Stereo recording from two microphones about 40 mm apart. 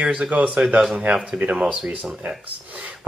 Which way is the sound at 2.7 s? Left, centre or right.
Right.